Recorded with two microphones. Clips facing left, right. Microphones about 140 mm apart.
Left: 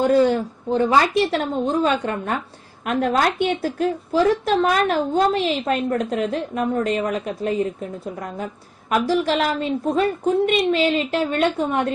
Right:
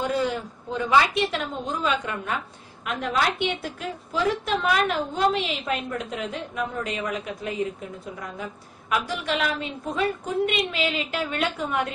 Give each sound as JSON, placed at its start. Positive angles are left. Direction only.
{"t": 0.0, "sound": "a woman's voice", "side_deg": 35}
{"t": 9.0, "sound": "a woman's voice", "side_deg": 30}